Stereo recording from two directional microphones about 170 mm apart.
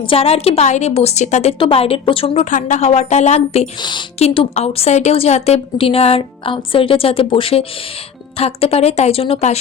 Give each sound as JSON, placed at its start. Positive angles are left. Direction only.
{"t": 0.0, "sound": "speech", "side_deg": 35}
{"t": 3.8, "sound": "speech", "side_deg": 25}